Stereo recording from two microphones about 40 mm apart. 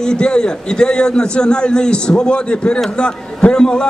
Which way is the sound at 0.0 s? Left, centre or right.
Left.